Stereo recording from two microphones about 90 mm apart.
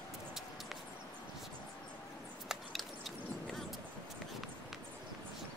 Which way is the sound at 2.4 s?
Centre (ahead or behind).